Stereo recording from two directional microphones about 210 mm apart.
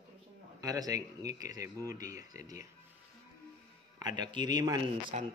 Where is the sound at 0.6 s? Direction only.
15° right (ahead or behind).